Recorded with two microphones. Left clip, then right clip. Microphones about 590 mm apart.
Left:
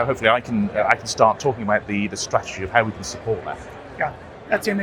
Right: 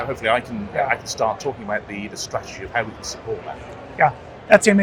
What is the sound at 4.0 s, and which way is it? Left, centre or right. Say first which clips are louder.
Speech: right 8 dB; right.